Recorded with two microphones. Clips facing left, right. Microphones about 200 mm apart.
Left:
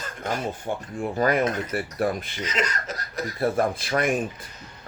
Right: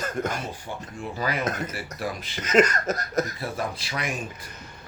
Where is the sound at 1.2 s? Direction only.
50° left (ahead or behind).